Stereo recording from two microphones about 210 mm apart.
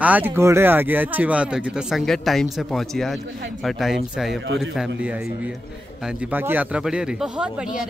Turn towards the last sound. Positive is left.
turn(degrees=-5)  # may be behind; listen again after turning